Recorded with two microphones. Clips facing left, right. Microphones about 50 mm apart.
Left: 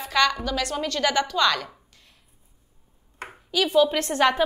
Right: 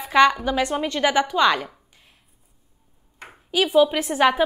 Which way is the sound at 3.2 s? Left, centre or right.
Left.